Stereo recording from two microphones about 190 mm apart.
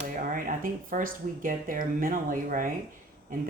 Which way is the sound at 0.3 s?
45° right (ahead or behind).